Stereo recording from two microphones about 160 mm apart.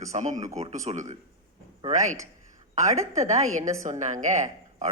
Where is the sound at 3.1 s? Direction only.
45° right (ahead or behind).